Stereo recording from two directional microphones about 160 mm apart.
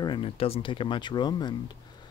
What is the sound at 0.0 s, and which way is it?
Speech, 30° left (ahead or behind).